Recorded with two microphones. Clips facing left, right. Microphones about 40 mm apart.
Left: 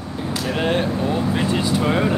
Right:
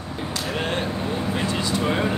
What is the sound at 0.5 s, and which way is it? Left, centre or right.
Speech, centre.